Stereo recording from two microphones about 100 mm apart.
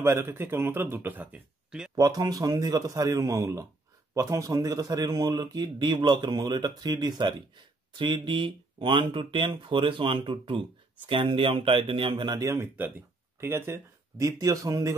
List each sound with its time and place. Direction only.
0.0 s speech: 25° right (ahead or behind)
2.0 s a man's voice: 40° right (ahead or behind)
12.4 s a man's voice: 30° right (ahead or behind)